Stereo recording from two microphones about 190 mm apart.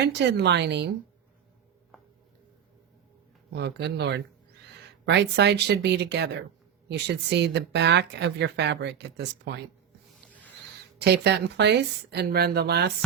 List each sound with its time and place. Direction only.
0.0 s speech: 60° right (ahead or behind)
3.5 s speech: 60° right (ahead or behind)
11.0 s speech: 60° right (ahead or behind)